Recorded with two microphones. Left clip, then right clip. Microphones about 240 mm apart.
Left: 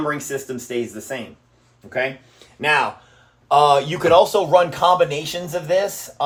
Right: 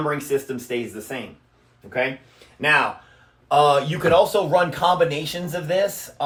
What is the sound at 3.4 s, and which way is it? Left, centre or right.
Speech, left.